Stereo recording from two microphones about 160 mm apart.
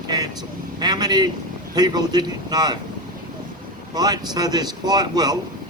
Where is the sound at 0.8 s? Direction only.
25° right (ahead or behind).